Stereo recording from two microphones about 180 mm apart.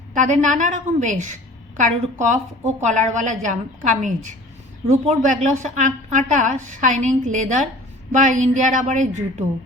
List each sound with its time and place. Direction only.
0.1 s a woman's voice: 45° right (ahead or behind)